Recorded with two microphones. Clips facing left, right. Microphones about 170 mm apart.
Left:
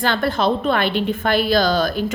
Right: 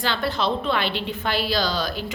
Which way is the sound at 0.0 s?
50° left (ahead or behind).